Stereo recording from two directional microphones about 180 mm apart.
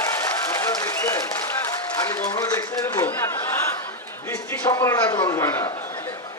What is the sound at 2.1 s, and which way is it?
A man's voice, 15° left (ahead or behind).